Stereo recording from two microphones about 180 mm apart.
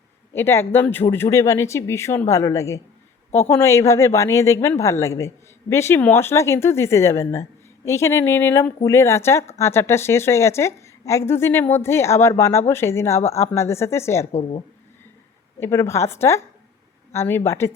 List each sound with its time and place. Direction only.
0.3 s a woman's voice: 15° left (ahead or behind)
15.6 s a woman's voice: 15° left (ahead or behind)